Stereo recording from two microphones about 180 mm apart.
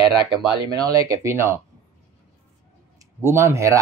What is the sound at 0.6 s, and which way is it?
Speech, 20° right (ahead or behind).